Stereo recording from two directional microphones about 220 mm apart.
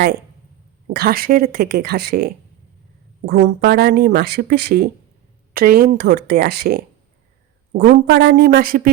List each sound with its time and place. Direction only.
0.9 s speech: 45° right (ahead or behind)